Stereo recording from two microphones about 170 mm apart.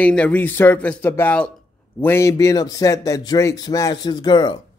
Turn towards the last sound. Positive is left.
turn(degrees=25)  # may be behind; listen again after turning